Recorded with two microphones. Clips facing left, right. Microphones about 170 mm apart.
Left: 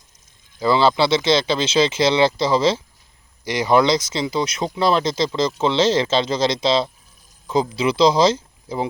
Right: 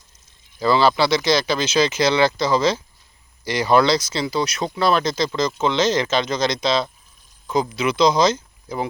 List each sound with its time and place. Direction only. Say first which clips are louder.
0.6 s speech: even; 20° left (ahead or behind)